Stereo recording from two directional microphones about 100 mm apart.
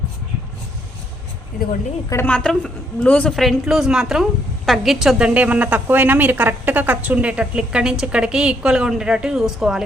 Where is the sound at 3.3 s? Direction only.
Centre (ahead or behind).